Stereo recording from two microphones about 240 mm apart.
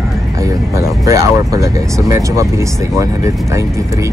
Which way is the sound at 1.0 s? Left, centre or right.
Centre.